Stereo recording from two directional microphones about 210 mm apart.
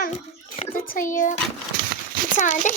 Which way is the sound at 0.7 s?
40° left (ahead or behind).